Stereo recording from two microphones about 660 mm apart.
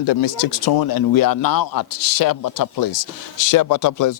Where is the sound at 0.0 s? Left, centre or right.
Left.